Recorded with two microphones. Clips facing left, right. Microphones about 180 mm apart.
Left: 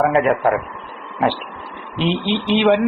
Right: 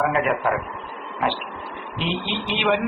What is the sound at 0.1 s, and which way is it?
Speech, 35° left (ahead or behind).